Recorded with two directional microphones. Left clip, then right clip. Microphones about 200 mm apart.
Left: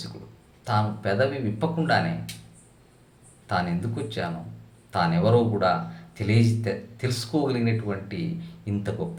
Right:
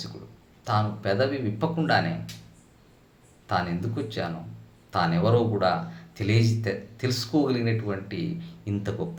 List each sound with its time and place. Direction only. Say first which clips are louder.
0.6 s speech: left 1 dB; 10° right (ahead or behind)
3.4 s speech: even; 10° right (ahead or behind)